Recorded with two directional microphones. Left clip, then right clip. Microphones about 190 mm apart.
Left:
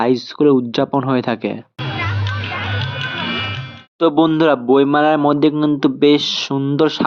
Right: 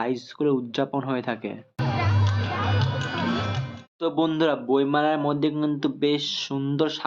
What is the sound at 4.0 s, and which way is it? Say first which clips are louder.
Speech: left 10 dB; 40° left (ahead or behind).